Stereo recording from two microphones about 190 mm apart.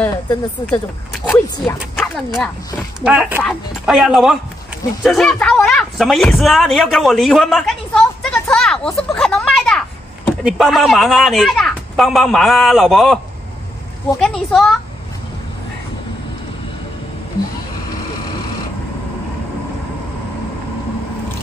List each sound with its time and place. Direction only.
0.0 s speech: 10° left (ahead or behind)
3.1 s speech: 10° right (ahead or behind)
8.8 s a sound: centre (ahead or behind)
10.4 s speech: centre (ahead or behind)
14.2 s speech: centre (ahead or behind)